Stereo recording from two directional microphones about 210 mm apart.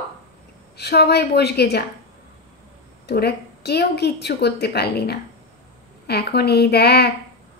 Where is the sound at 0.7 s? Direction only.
50° left (ahead or behind).